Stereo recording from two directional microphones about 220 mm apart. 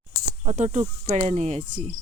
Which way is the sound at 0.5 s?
35° right (ahead or behind).